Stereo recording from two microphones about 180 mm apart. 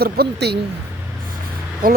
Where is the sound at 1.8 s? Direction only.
50° right (ahead or behind).